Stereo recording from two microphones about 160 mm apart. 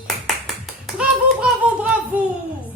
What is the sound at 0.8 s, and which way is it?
Clapping, 5° right (ahead or behind).